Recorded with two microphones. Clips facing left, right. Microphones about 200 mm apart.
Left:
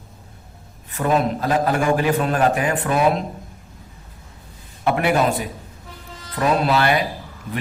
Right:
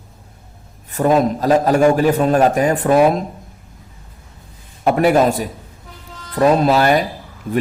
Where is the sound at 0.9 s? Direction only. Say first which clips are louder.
Right 5 dB; 40° right (ahead or behind).